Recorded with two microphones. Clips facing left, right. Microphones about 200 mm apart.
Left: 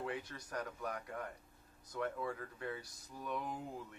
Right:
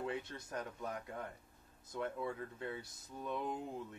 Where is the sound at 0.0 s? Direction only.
25° right (ahead or behind).